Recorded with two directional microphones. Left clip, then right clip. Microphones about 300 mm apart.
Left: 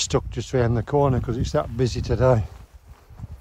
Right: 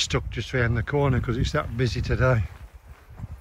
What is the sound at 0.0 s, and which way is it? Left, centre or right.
Speech, centre.